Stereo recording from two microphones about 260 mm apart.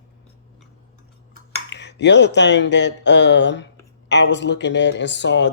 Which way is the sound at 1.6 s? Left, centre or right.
Left.